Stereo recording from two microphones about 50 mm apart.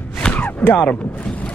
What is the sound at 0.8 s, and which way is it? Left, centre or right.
Speech, left.